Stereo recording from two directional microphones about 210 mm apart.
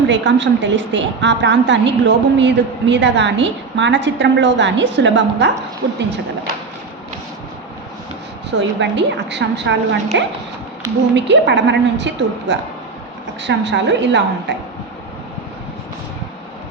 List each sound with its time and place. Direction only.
0.1 s a woman's voice: 55° right (ahead or behind)
8.4 s a woman's voice: 55° right (ahead or behind)